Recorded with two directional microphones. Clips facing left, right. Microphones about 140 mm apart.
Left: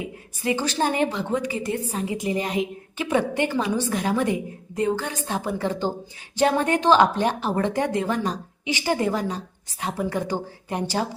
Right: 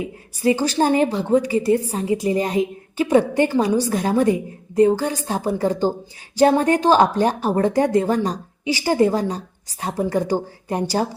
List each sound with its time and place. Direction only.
0.3 s speech: 35° right (ahead or behind)